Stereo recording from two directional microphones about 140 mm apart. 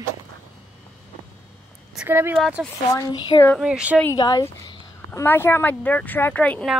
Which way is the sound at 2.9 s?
30° left (ahead or behind).